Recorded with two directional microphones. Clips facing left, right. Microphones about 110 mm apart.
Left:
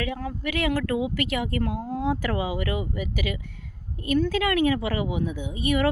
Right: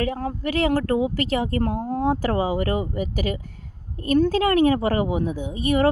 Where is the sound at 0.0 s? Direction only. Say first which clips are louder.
Right 4 dB; 40° right (ahead or behind).